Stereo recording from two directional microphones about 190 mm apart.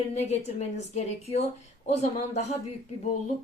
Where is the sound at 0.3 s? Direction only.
35° left (ahead or behind).